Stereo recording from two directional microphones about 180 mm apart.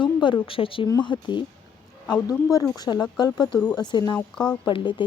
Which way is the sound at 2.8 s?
20° left (ahead or behind).